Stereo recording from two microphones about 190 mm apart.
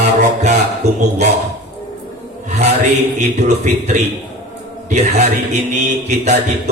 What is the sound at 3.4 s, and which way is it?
A man's voice, 40° right (ahead or behind).